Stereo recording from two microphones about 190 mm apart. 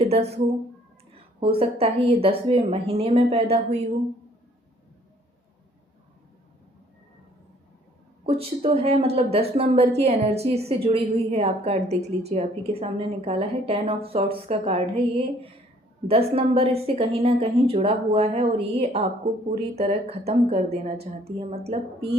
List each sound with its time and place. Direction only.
0.0 s speech: 35° right (ahead or behind)
1.4 s a woman's voice: 30° right (ahead or behind)
8.3 s a woman's voice: 30° right (ahead or behind)
16.0 s a woman's voice: 30° right (ahead or behind)